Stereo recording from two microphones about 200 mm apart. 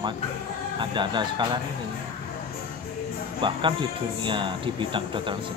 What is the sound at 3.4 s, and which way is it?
Speech, 25° right (ahead or behind).